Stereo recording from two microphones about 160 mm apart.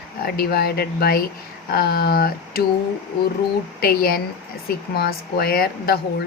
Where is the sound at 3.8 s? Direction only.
70° left (ahead or behind).